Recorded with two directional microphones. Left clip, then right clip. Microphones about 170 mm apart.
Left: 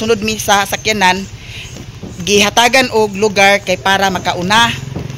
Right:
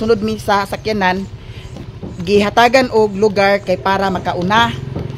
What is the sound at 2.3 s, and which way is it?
Speech, 10° right (ahead or behind).